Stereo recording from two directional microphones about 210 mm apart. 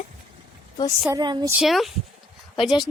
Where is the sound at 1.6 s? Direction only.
Centre (ahead or behind).